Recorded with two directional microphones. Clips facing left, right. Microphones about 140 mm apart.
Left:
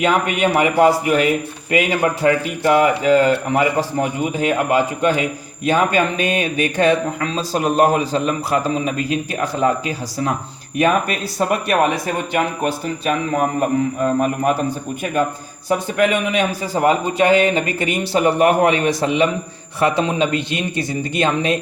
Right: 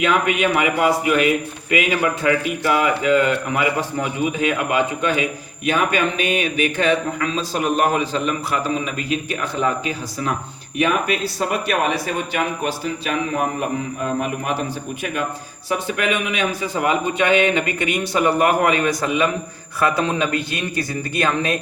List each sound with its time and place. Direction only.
0.0 s speech: 35° left (ahead or behind)
15.7 s a man's voice: 40° left (ahead or behind)